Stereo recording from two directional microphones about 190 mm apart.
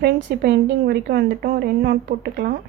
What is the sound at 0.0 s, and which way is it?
A woman's voice, 65° right (ahead or behind).